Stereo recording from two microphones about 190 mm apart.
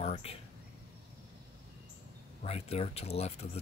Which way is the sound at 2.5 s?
35° left (ahead or behind).